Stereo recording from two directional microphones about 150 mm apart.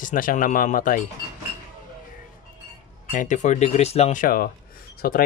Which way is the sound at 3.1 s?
55° left (ahead or behind).